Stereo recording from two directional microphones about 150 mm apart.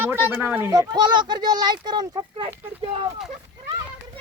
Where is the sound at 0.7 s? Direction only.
25° right (ahead or behind).